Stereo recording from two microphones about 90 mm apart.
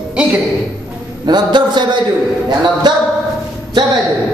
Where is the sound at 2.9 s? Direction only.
55° right (ahead or behind).